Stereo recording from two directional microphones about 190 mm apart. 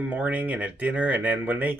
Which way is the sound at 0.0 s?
10° right (ahead or behind).